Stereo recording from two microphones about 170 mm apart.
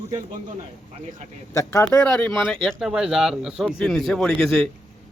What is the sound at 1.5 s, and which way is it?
A man's voice, 15° left (ahead or behind).